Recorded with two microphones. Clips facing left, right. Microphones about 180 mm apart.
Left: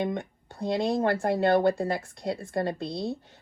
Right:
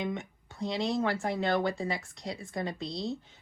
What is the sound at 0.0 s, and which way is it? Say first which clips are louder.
Speech: left 5 dB; 55° left (ahead or behind).